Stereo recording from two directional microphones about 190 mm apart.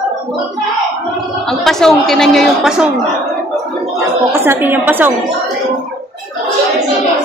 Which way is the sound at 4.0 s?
10° right (ahead or behind).